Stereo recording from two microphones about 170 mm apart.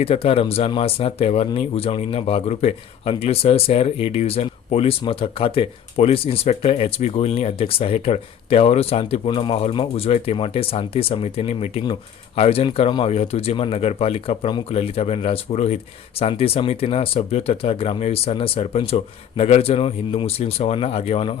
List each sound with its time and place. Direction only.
0.0 s speech: 35° left (ahead or behind)